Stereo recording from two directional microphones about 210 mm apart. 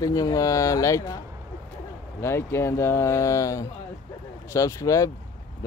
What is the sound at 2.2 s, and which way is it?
Speech, 10° left (ahead or behind).